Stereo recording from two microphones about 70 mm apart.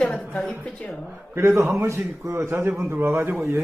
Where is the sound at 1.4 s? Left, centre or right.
Right.